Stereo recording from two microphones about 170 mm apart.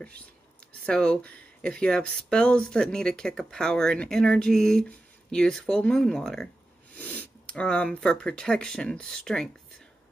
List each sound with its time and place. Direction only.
0.8 s speech: 5° left (ahead or behind)